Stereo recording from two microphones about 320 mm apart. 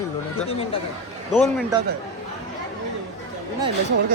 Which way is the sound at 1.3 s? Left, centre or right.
Centre.